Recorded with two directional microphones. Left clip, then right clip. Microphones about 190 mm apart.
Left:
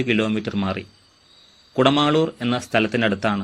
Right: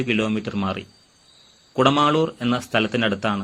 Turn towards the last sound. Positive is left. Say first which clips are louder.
# left 1 dB
turn(degrees=25)  # may be behind; listen again after turning